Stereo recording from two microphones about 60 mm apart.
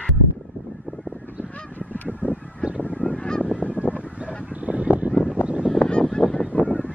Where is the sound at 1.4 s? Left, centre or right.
Right.